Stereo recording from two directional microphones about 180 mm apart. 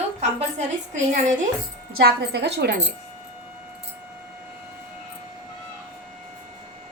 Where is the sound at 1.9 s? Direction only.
60° right (ahead or behind).